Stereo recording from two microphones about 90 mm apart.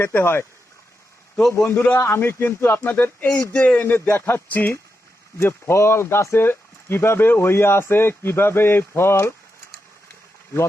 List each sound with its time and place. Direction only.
0.0 s speech: 25° left (ahead or behind)
1.5 s speech: 20° left (ahead or behind)
3.9 s speech: 25° left (ahead or behind)